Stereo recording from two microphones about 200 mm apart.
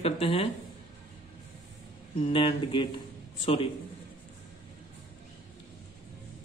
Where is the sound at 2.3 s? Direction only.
25° left (ahead or behind).